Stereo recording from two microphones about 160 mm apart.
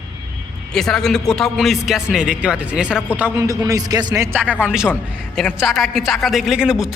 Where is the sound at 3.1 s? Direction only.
15° right (ahead or behind).